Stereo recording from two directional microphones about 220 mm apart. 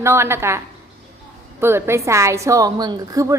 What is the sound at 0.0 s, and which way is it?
A woman's voice, 10° right (ahead or behind).